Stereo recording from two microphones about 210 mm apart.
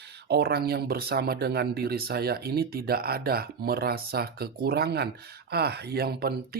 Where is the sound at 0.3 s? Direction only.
50° right (ahead or behind).